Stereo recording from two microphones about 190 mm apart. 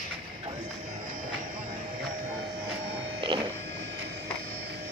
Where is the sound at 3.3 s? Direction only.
25° right (ahead or behind).